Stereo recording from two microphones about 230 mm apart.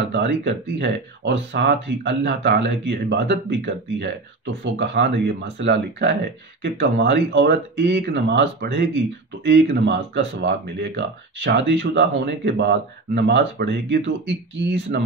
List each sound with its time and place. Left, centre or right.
0.0 s speech: right